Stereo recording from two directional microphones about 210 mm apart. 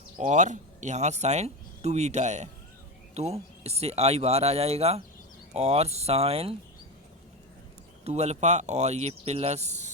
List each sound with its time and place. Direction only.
0.2 s speech: 35° right (ahead or behind)
8.0 s speech: 30° right (ahead or behind)